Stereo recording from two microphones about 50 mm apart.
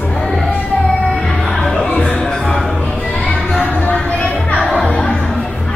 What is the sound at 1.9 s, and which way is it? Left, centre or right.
Music, left.